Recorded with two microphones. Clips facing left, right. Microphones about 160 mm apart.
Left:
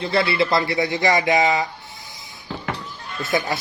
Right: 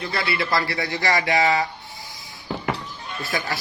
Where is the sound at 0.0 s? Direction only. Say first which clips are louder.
Left 6 dB; 25° left (ahead or behind).